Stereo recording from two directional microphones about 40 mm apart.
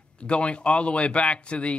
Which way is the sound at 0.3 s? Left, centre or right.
Left.